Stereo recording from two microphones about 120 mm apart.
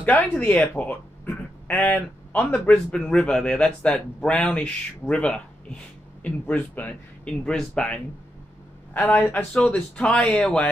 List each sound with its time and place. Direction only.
0.0 s speech: 15° left (ahead or behind)
9.5 s speech: 5° left (ahead or behind)